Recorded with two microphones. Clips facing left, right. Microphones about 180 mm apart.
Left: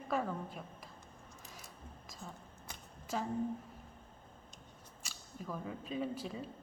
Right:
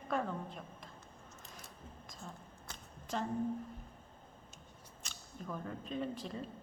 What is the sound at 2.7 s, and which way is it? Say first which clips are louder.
Shuffling cards: left 1 dB; 5° left (ahead or behind).